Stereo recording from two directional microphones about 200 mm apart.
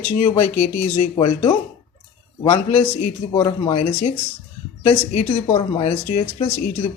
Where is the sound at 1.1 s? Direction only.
25° left (ahead or behind).